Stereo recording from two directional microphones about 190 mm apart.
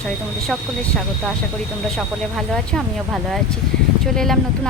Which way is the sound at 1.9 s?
Centre (ahead or behind).